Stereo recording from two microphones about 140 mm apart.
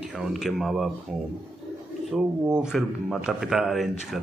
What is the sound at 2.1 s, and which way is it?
A man's voice, 5° right (ahead or behind).